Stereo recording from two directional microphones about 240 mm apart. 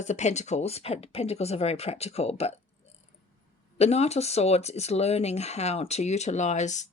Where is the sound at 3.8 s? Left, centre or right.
Left.